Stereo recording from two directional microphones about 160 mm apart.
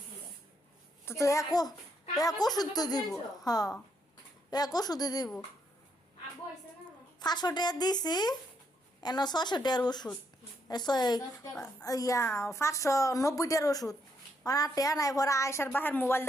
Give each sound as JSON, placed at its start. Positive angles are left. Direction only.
{"t": 1.0, "sound": "a woman's voice", "side_deg": 20}
{"t": 7.2, "sound": "a woman's voice", "side_deg": 25}